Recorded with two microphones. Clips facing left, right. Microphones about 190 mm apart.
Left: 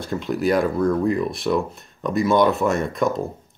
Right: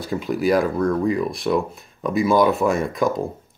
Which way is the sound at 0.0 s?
Centre (ahead or behind).